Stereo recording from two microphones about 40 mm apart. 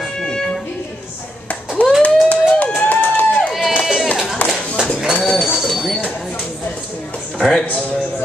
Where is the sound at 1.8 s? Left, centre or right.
Left.